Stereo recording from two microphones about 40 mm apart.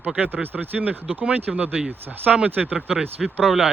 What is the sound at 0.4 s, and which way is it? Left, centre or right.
Speech, right.